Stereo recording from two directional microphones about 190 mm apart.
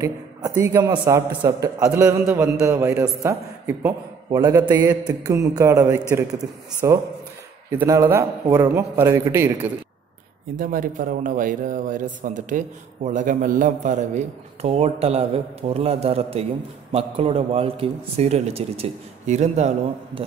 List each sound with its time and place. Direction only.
0.0 s a man's voice: 15° right (ahead or behind)
10.5 s a man's voice: 45° right (ahead or behind)